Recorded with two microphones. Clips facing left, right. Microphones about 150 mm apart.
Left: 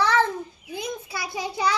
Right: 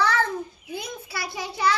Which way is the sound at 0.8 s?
20° left (ahead or behind).